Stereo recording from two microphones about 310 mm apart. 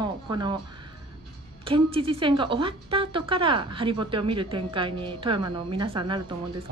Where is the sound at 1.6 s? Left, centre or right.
Centre.